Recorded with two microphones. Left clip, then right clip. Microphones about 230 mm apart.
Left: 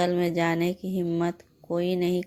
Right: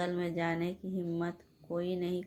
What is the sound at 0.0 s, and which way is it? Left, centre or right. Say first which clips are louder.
Speech: left 10 dB; left.